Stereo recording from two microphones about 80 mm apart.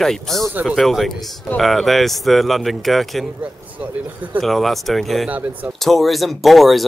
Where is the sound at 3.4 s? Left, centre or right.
Centre.